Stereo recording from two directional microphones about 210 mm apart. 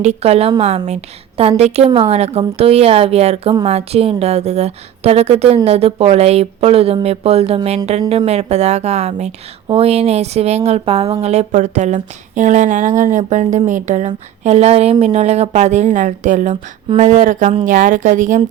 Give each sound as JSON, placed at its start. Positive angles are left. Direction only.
{"t": 0.0, "sound": "a woman's voice", "side_deg": -30}